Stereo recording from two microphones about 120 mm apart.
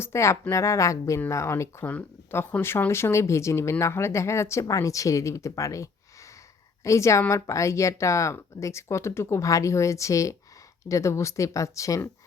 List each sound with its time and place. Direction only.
0.0 s speech: 25° left (ahead or behind)